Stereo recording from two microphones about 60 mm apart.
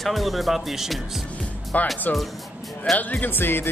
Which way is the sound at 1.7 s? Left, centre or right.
Left.